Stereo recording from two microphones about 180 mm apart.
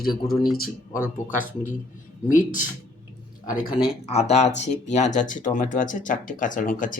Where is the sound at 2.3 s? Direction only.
45° left (ahead or behind).